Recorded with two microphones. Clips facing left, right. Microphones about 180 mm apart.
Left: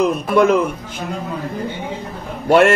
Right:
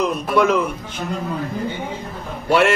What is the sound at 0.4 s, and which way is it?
Speech, 50° left (ahead or behind).